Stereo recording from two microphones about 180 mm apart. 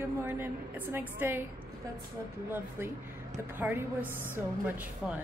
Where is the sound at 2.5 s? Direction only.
10° right (ahead or behind).